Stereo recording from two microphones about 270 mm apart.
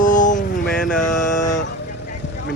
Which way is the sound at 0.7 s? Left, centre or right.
Centre.